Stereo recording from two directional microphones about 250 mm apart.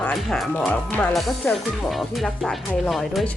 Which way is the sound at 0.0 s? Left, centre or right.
Centre.